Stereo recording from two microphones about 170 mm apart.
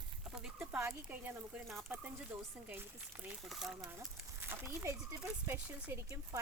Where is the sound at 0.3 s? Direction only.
5° right (ahead or behind).